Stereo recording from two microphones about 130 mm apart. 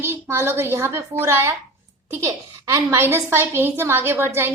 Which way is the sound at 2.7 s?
20° right (ahead or behind).